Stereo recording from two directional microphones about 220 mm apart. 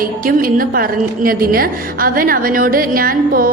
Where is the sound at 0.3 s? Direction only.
40° right (ahead or behind).